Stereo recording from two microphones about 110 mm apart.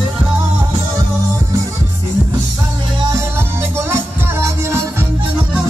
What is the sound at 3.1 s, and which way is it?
Music, 25° right (ahead or behind).